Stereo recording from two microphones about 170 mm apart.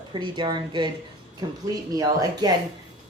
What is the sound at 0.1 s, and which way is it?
Speech, 30° right (ahead or behind).